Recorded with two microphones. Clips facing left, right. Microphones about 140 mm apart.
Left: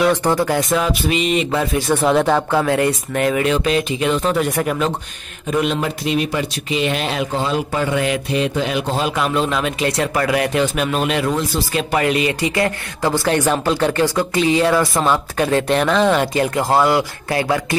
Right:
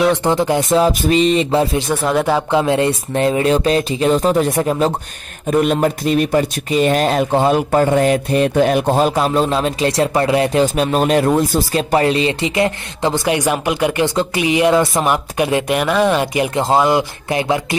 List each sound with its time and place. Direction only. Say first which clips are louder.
0.2 s speech: right 2 dB; 20° right (ahead or behind)
2.0 s speech: left 1 dB; 5° right (ahead or behind)
2.5 s speech: right 2 dB; 20° right (ahead or behind)
5.5 s speech: right 5 dB; 45° right (ahead or behind)
11.9 s speech: right 3 dB; 30° right (ahead or behind)